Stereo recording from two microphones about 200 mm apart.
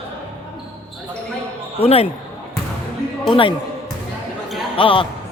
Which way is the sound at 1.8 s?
30° left (ahead or behind).